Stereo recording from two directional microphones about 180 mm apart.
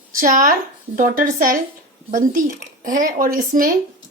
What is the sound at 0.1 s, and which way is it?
Speech, 45° right (ahead or behind).